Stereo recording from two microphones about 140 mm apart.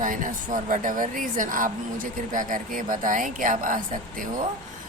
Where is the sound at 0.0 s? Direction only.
70° right (ahead or behind).